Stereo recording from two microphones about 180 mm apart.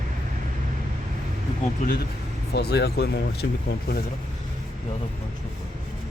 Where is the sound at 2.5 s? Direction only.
65° left (ahead or behind).